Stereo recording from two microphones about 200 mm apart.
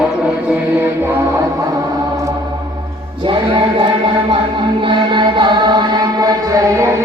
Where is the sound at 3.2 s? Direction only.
25° right (ahead or behind).